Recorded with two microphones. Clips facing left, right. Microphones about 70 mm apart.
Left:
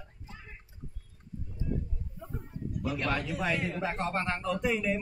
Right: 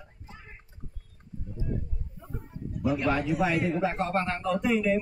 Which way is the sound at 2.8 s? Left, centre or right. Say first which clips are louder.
Right 6 dB; centre.